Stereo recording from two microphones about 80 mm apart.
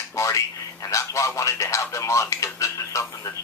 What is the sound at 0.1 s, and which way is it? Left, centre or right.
A man's voice, left.